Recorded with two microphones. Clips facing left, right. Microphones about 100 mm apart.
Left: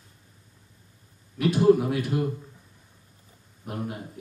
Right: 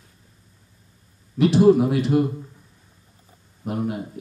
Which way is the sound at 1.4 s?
25° right (ahead or behind).